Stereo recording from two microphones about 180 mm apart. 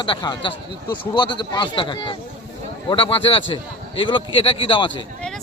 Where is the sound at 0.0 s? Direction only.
25° left (ahead or behind).